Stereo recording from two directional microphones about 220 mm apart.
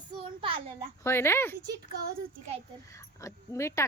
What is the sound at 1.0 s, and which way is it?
Speech, 10° left (ahead or behind).